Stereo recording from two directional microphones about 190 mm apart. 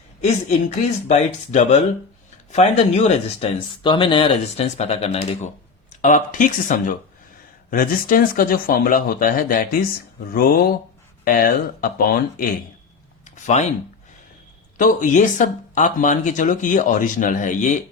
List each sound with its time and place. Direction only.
1.0 s speech: 35° left (ahead or behind)
13.2 s a sound: 40° left (ahead or behind)
14.8 s speech: 45° left (ahead or behind)